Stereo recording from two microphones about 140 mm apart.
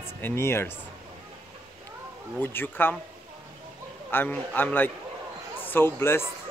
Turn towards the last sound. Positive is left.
turn(degrees=15)  # may be behind; listen again after turning